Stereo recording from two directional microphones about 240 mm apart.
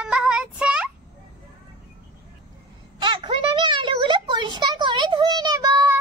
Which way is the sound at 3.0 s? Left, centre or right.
Right.